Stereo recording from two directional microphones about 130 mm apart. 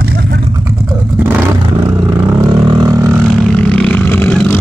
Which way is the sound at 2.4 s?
30° right (ahead or behind).